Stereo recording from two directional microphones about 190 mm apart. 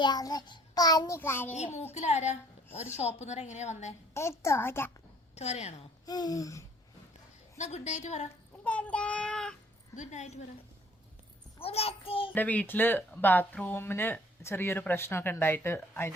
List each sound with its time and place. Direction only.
0.0 s child singing: 20° left (ahead or behind)
1.5 s a woman's voice: 35° left (ahead or behind)
4.1 s speech: 15° left (ahead or behind)
5.3 s a woman's voice: 35° left (ahead or behind)
6.1 s child singing: 20° left (ahead or behind)
7.6 s a woman's voice: 35° left (ahead or behind)
8.6 s child singing: 5° left (ahead or behind)
9.9 s a woman's voice: 40° left (ahead or behind)
11.6 s a woman's voice: 30° left (ahead or behind)
12.3 s speech: 10° left (ahead or behind)